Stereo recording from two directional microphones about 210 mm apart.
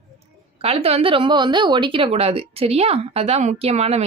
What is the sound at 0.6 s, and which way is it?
A woman's voice, 30° right (ahead or behind).